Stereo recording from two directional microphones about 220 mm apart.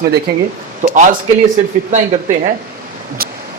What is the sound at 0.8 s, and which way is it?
Speech, 35° right (ahead or behind).